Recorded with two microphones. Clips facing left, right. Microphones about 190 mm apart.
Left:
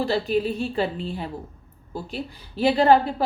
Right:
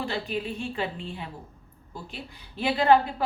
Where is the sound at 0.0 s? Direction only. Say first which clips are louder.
Left 8 dB; 35° left (ahead or behind).